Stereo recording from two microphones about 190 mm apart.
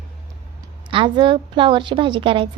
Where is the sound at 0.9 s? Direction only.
25° right (ahead or behind).